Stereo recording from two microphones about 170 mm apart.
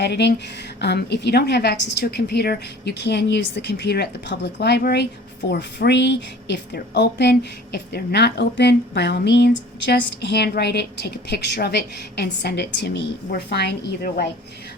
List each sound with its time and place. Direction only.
0.0 s a woman's voice: 85° left
5.5 s a woman's voice: 85° left